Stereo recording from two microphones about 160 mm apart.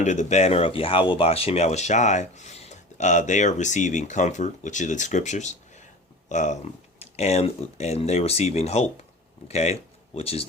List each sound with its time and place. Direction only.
0.0 s speech: 45° left (ahead or behind)